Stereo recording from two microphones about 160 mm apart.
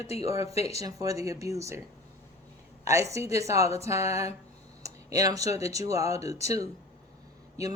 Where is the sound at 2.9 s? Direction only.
20° right (ahead or behind).